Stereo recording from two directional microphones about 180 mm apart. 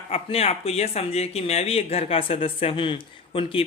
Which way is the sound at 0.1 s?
35° left (ahead or behind).